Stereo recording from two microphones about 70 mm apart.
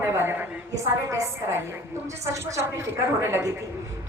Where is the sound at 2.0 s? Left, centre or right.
Right.